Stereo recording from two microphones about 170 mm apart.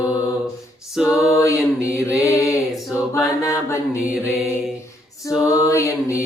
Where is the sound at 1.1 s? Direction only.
20° left (ahead or behind).